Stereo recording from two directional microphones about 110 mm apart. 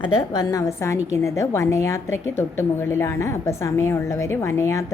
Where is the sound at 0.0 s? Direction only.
35° left (ahead or behind).